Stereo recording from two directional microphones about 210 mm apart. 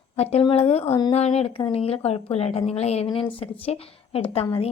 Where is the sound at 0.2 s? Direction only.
30° left (ahead or behind).